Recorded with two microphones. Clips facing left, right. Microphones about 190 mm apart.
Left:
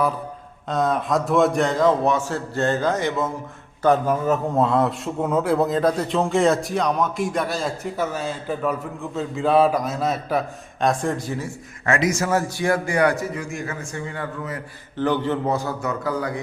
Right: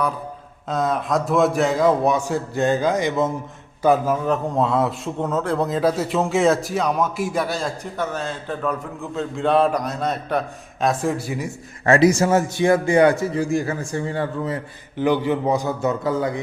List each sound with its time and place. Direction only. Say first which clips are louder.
0.7 s a man's voice: even; centre (ahead or behind); by 3.3 s 15° right (ahead or behind)
3.8 s speech: even; 5° right (ahead or behind)
11.9 s a man's voice: right 6 dB; 30° right (ahead or behind)
14.9 s a man's voice: right 2 dB; 10° right (ahead or behind)